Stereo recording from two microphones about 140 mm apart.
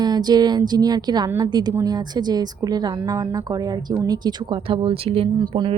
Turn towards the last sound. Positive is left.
turn(degrees=-35)  # may be behind; listen again after turning